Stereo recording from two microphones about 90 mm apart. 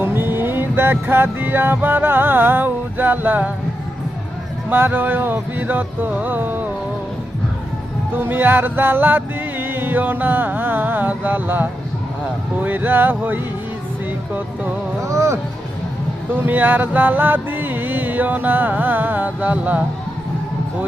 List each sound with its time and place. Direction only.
0.0 s music: 25° right (ahead or behind)
4.7 s music: 25° right (ahead or behind)
8.1 s music: 20° right (ahead or behind)
15.0 s speech: 35° right (ahead or behind)
16.3 s music: 20° right (ahead or behind)